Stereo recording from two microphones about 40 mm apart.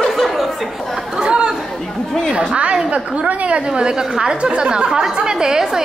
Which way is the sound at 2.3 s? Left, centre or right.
Right.